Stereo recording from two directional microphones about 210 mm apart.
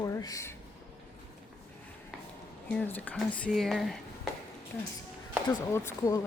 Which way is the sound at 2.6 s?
5° left (ahead or behind).